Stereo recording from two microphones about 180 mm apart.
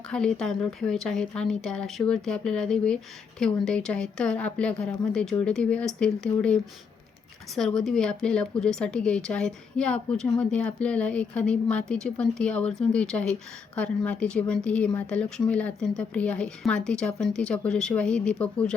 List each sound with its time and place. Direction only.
0.1 s speech: 5° left (ahead or behind)